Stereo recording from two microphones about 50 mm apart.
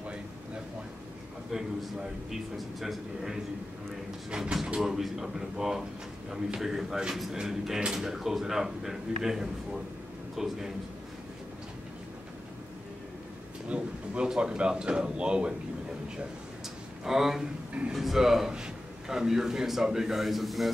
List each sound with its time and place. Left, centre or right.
1.5 s a man's voice: centre
2.8 s a man's voice: centre
13.7 s speech: centre
17.0 s a man's voice: centre